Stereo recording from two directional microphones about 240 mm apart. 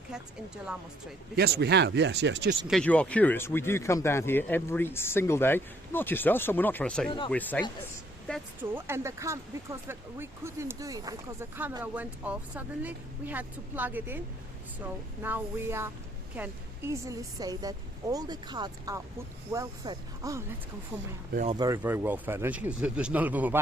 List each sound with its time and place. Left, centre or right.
0.1 s speech: centre
1.4 s speech: right
2.6 s speech: centre
8.7 s speech: centre
21.3 s speech: right
21.6 s speech: centre